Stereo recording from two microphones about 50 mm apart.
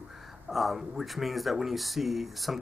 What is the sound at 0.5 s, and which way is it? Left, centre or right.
Speech, centre.